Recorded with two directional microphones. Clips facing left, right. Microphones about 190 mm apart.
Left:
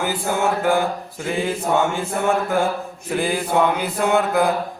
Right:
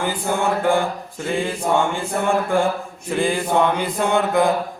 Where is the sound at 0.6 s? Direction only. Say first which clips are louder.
Even; 5° left (ahead or behind).